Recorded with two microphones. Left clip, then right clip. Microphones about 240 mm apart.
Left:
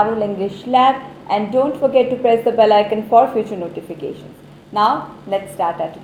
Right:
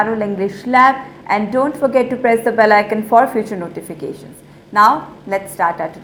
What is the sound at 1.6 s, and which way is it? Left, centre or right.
Speech, right.